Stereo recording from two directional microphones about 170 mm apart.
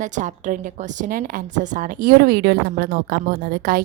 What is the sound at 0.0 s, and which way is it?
A woman's voice, 45° right (ahead or behind).